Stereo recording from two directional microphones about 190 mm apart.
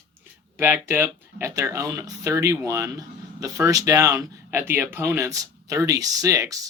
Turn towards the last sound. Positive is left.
turn(degrees=-15)  # may be behind; listen again after turning